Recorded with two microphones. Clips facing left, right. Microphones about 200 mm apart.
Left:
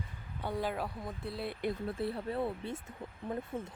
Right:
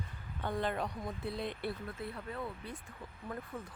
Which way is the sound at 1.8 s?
30° left (ahead or behind).